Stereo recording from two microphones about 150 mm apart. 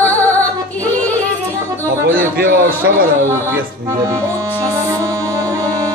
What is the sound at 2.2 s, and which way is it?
Speech, 70° right (ahead or behind).